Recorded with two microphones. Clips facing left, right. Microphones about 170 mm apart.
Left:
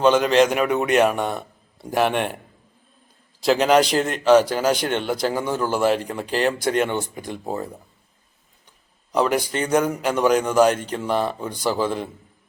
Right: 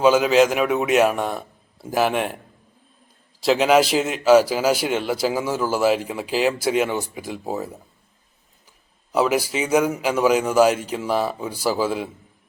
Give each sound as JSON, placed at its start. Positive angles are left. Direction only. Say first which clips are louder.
{"t": 0.0, "sound": "a man's voice", "louder": "right 1 dB", "side_deg": -5}
{"t": 3.4, "sound": "a man's voice", "louder": "even", "side_deg": 0}
{"t": 9.1, "sound": "a man's voice", "louder": "right 1 dB", "side_deg": -5}